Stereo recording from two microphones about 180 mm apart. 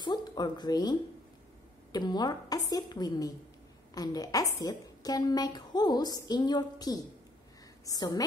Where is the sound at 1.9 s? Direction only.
25° left (ahead or behind).